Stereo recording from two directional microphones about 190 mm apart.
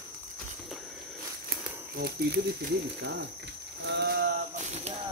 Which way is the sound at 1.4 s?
55° right (ahead or behind).